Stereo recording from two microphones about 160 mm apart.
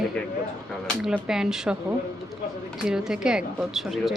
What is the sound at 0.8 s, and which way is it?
Speech, 5° right (ahead or behind).